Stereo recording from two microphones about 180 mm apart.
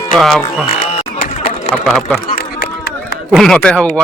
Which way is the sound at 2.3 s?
60° left (ahead or behind).